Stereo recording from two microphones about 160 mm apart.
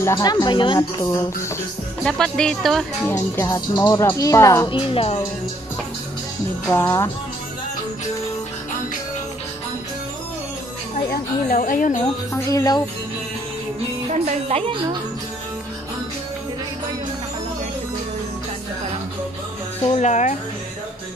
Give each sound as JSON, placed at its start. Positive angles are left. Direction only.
{"t": 0.0, "sound": "speech", "side_deg": 20}
{"t": 2.0, "sound": "speech", "side_deg": 5}
{"t": 3.1, "sound": "speech", "side_deg": 15}
{"t": 4.6, "sound": "speech", "side_deg": 35}
{"t": 6.7, "sound": "speech", "side_deg": 15}
{"t": 11.1, "sound": "a woman's voice", "side_deg": 65}
{"t": 12.4, "sound": "speech", "side_deg": 20}
{"t": 14.2, "sound": "a woman's voice", "side_deg": -35}
{"t": 20.0, "sound": "speech", "side_deg": 45}